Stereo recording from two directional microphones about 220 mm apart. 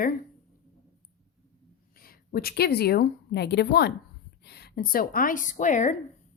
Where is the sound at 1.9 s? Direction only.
40° left (ahead or behind).